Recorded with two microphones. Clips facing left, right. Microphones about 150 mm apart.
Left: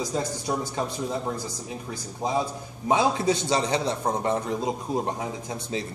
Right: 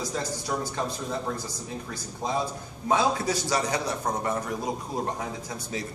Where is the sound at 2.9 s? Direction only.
25° left (ahead or behind).